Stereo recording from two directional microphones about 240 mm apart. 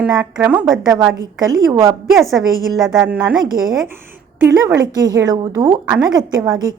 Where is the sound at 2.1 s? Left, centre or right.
Centre.